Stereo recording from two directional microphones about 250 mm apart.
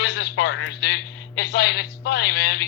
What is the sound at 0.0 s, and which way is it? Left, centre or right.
A man's voice, left.